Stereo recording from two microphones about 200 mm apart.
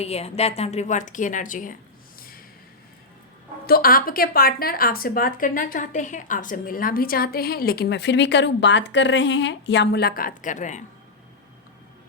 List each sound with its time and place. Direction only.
0.0 s a woman's voice: 30° left (ahead or behind)
3.7 s a woman's voice: 45° left (ahead or behind)